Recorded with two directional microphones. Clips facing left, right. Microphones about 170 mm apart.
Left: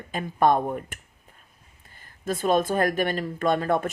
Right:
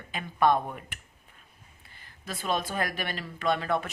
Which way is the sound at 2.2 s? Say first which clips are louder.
Left 8 dB; 50° left (ahead or behind).